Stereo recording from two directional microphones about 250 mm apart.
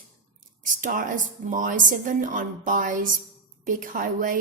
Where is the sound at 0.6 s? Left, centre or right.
Right.